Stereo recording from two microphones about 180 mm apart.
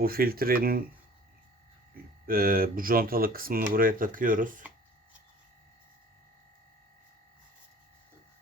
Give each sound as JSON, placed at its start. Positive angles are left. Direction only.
{"t": 0.0, "sound": "speech", "side_deg": -55}
{"t": 2.2, "sound": "speech", "side_deg": -55}